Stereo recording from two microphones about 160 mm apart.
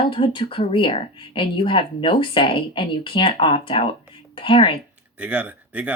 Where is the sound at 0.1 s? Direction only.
35° left (ahead or behind).